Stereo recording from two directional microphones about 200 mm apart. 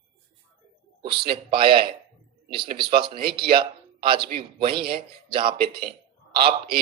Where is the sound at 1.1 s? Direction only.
25° right (ahead or behind).